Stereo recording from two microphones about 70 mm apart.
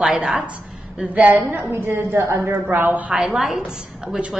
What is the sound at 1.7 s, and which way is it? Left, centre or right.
Speech, right.